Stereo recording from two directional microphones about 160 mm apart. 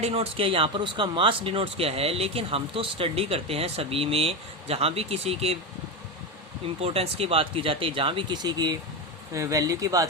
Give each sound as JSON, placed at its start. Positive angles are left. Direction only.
{"t": 0.0, "sound": "speech", "side_deg": -40}
{"t": 6.8, "sound": "speech", "side_deg": -40}